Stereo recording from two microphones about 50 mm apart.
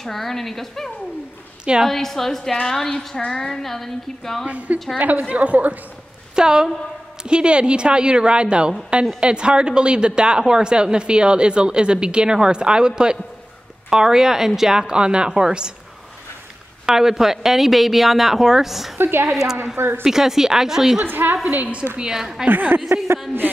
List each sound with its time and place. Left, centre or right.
0.0 s a woman's voice: centre
1.6 s a woman's voice: centre
1.9 s a woman's voice: centre
4.5 s a woman's voice: right
6.3 s a woman's voice: centre
16.8 s speech: centre
18.9 s a woman's voice: right
19.3 s a woman's voice: centre
21.0 s a woman's voice: right
21.5 s a woman's voice: right
21.9 s a woman's voice: centre
22.5 s a woman's voice: right